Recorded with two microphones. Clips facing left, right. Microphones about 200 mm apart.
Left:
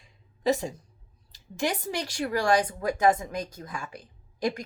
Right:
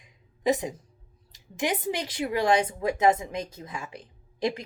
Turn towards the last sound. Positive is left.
turn(degrees=-25)  # may be behind; listen again after turning